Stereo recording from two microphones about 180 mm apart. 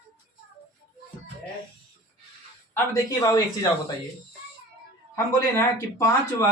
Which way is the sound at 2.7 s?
20° left (ahead or behind).